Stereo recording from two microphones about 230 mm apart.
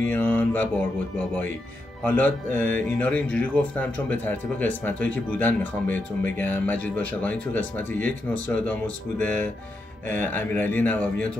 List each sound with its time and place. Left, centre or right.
0.0 s speech: centre
2.0 s speech: centre